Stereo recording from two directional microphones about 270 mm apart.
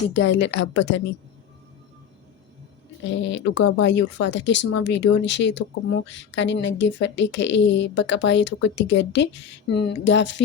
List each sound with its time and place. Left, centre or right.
0.1 s speech: left
3.1 s speech: left